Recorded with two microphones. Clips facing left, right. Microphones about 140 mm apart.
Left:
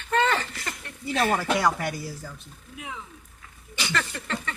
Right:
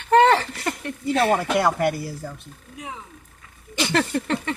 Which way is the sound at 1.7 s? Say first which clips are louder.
Right 8 dB; 55° right (ahead or behind).